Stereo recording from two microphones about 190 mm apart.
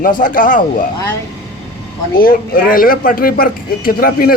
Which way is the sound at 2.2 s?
50° left (ahead or behind).